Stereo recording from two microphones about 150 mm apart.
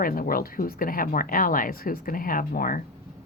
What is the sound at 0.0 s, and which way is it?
Speech, 70° left (ahead or behind).